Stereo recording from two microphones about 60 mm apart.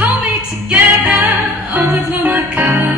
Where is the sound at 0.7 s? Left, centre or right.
Right.